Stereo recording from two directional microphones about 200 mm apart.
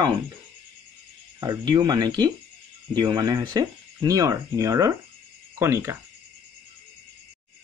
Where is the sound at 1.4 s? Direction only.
20° right (ahead or behind).